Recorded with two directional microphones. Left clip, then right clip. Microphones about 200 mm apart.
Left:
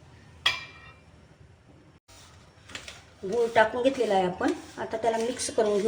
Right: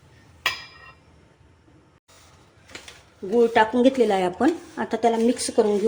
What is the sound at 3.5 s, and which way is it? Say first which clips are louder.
Speech: right 4 dB; 40° right (ahead or behind).